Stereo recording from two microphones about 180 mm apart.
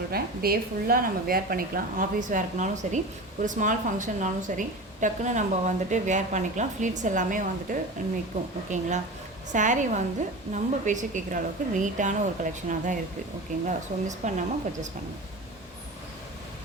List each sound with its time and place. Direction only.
0.1 s a woman's voice: 55° right (ahead or behind); by 14.8 s 40° right (ahead or behind)